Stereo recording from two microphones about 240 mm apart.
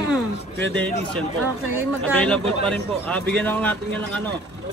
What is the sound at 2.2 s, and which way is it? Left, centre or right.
A man's voice, centre.